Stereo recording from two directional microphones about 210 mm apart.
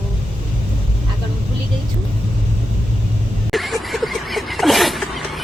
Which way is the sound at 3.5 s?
Centre (ahead or behind).